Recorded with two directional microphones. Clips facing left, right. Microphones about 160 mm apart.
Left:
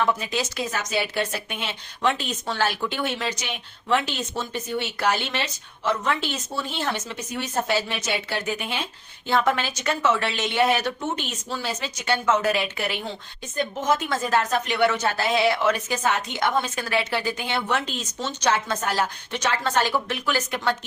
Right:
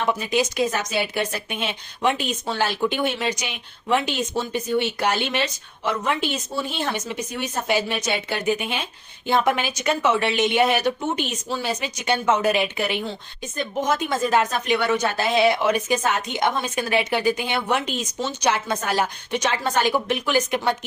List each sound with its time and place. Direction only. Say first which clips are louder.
0.1 s speech: right 4 dB; 15° right (ahead or behind)